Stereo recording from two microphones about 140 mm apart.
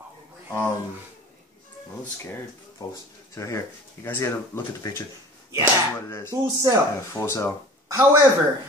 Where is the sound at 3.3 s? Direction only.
20° left (ahead or behind).